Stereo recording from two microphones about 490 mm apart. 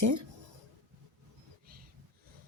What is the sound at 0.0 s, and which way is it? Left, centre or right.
Speech, right.